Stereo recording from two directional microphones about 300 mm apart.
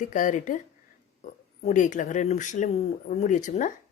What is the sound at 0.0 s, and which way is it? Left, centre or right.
Speech, left.